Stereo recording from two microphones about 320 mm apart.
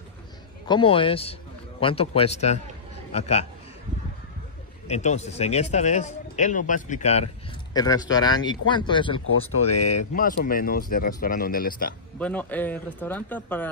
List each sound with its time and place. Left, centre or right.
0.7 s a man's voice: centre
4.8 s a man's voice: left
9.9 s a man's voice: left
12.2 s speech: centre